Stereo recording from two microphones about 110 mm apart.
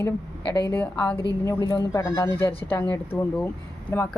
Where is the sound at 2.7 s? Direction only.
20° left (ahead or behind).